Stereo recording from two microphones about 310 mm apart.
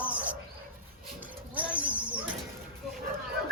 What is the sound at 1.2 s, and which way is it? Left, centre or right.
Bird, centre.